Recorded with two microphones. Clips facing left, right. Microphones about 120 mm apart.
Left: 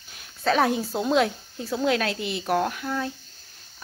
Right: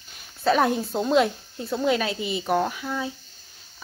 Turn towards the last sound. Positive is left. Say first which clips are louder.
# even
turn(degrees=0)  # may be behind; listen again after turning